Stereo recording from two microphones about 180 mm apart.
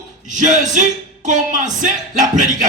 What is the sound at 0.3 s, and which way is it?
Speech, 45° right (ahead or behind).